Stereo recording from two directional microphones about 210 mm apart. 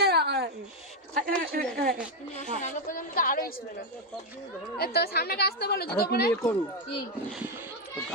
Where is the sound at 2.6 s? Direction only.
40° left (ahead or behind).